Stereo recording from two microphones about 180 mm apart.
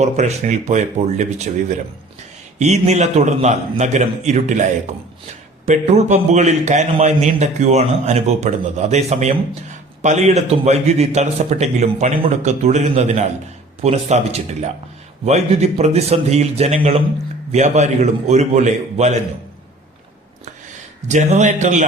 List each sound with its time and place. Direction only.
0.0 s a man's voice: 40° right (ahead or behind)
21.1 s a man's voice: 40° right (ahead or behind)